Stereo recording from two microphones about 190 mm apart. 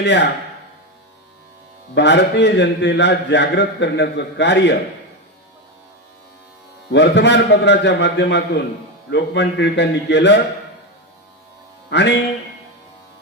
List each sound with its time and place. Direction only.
0.0 s a man's voice: 65° left (ahead or behind)
2.0 s a man's voice: 65° left (ahead or behind)
6.9 s a man's voice: 65° left (ahead or behind)
11.9 s music: 65° left (ahead or behind)